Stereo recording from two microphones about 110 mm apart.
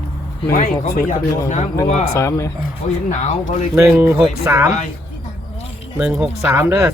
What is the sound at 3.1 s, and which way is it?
Speech, 90° left.